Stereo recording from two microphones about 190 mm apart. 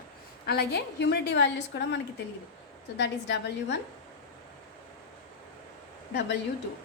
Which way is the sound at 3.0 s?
65° left (ahead or behind).